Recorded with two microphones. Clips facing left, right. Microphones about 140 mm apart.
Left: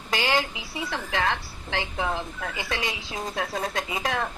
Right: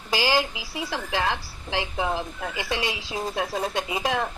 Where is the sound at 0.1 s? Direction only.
5° right (ahead or behind).